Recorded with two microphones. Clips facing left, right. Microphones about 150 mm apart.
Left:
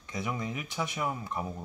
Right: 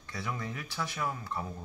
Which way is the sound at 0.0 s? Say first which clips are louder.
Left 3 dB; 15° left (ahead or behind).